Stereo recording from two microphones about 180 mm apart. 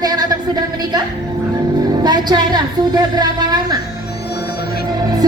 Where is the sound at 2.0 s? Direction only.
25° right (ahead or behind).